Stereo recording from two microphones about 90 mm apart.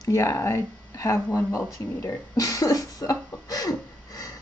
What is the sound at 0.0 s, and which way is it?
Speech, 35° left (ahead or behind).